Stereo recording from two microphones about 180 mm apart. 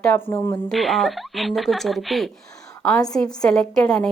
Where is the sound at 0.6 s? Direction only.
Centre (ahead or behind).